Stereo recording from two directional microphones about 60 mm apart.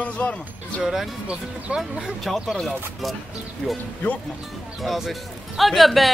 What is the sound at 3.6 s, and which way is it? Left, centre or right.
Speech, centre.